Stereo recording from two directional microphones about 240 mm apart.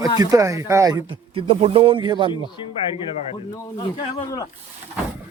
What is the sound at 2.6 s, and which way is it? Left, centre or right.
Speech, left.